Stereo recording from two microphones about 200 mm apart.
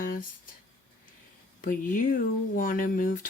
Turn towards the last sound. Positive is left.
turn(degrees=45)  # may be behind; listen again after turning